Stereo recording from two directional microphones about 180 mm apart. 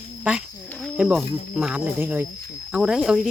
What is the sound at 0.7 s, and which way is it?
Wild animals, 5° left (ahead or behind).